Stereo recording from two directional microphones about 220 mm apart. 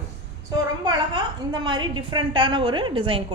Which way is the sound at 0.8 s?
20° right (ahead or behind).